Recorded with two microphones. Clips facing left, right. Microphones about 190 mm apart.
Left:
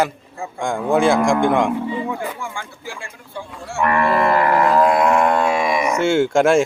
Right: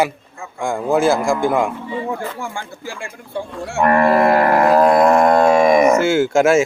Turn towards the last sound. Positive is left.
turn(degrees=-5)  # may be behind; listen again after turning